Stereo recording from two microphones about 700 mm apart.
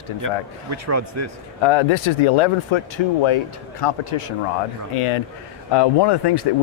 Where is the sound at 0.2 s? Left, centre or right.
Right.